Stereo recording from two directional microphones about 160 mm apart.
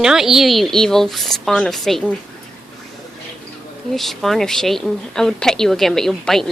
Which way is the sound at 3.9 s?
Centre (ahead or behind).